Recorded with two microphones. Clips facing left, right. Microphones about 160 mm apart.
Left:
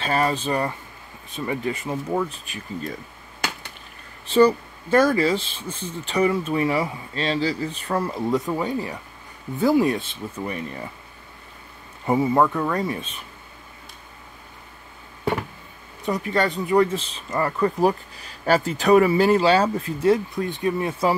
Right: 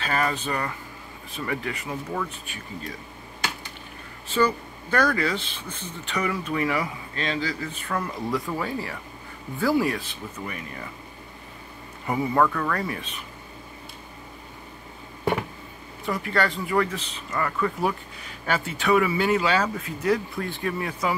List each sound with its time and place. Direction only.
0.0 s a man's voice: 30° left (ahead or behind)
4.3 s a man's voice: 35° left (ahead or behind)
12.1 s a man's voice: 25° left (ahead or behind)
16.1 s speech: 20° left (ahead or behind)